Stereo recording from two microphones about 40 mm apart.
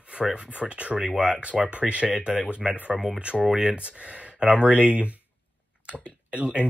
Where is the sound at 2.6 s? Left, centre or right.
Right.